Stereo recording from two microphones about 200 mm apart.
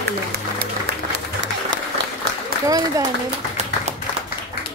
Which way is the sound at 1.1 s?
65° right (ahead or behind).